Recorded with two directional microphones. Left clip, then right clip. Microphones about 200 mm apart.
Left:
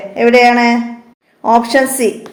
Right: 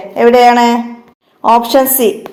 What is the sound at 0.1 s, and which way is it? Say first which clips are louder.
A woman's voice: right 2 dB; 20° right (ahead or behind).